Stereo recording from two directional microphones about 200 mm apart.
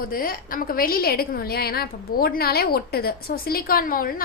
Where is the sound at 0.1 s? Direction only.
45° left (ahead or behind).